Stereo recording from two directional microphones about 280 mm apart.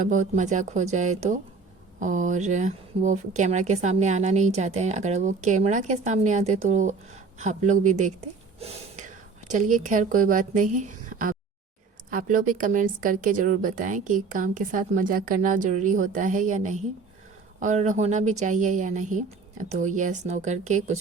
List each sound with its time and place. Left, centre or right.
0.0 s a woman's voice: right